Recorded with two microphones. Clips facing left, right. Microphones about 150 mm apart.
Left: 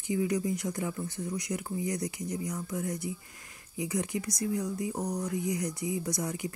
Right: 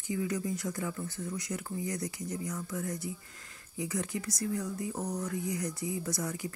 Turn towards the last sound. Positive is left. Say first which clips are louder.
# left 2 dB
turn(degrees=15)  # may be behind; listen again after turning